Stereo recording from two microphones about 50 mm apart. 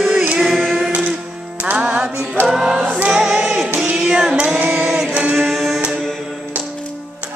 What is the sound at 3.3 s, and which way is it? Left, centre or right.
Music, centre.